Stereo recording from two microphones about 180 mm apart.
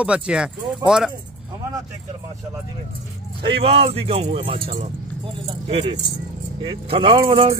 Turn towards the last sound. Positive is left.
turn(degrees=-30)  # may be behind; listen again after turning